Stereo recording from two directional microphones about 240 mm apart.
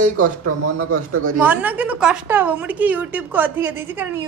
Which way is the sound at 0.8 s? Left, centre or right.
Right.